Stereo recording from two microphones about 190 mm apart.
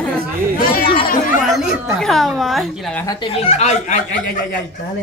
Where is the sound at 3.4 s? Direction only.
35° left (ahead or behind).